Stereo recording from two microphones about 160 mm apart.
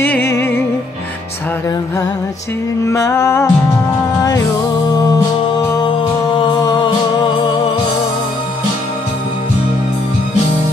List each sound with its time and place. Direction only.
0.0 s music: 15° left (ahead or behind)
2.8 s music: 20° left (ahead or behind)
6.3 s music: 30° left (ahead or behind)